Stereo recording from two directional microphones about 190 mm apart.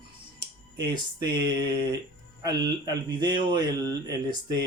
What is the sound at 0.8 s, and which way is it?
Speech, 20° right (ahead or behind).